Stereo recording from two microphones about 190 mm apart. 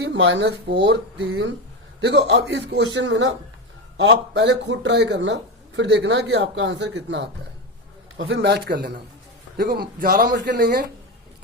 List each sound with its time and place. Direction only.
0.0 s a man's voice: 70° right (ahead or behind); by 10.3 s 50° right (ahead or behind)
10.3 s a man's voice: 60° right (ahead or behind)